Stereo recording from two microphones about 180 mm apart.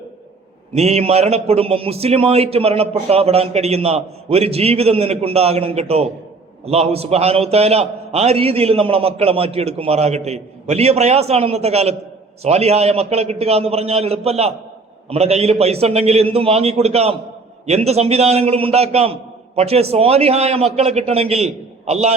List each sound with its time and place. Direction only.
0.7 s a man's voice: 35° right (ahead or behind)